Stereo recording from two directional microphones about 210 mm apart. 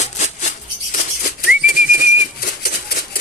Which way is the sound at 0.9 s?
45° left (ahead or behind).